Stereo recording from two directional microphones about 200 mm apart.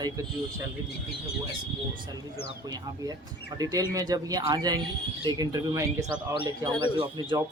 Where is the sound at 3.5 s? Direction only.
20° right (ahead or behind).